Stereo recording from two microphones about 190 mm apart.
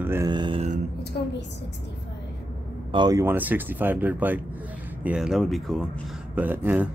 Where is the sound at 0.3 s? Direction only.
25° right (ahead or behind).